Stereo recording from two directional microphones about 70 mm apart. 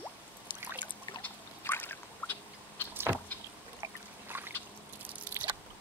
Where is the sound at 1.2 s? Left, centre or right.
Left.